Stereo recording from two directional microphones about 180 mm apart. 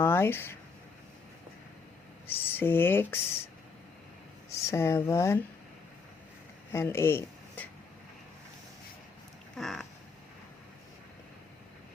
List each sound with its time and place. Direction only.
0.0 s speech: 10° left (ahead or behind)
2.2 s speech: 10° left (ahead or behind)
4.4 s speech: 15° left (ahead or behind)
6.7 s speech: 15° left (ahead or behind)
9.6 s cat: centre (ahead or behind)